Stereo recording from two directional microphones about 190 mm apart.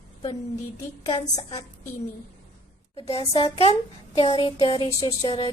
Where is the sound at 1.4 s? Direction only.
30° left (ahead or behind).